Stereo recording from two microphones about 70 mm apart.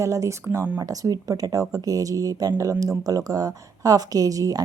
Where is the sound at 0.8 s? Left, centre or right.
Right.